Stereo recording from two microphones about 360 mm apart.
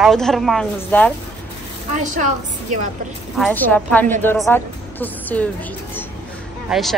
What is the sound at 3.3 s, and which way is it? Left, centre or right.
A woman's voice, centre.